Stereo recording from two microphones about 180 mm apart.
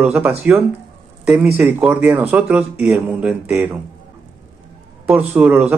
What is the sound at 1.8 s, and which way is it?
Speech, 5° right (ahead or behind).